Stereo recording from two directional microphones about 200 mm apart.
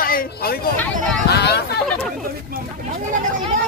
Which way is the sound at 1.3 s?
55° left (ahead or behind).